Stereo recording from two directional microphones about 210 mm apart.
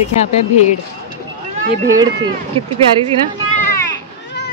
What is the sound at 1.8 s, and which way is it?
Speech, 20° right (ahead or behind).